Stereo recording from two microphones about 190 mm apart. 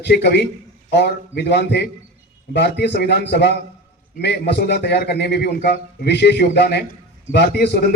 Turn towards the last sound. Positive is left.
turn(degrees=60)  # may be behind; listen again after turning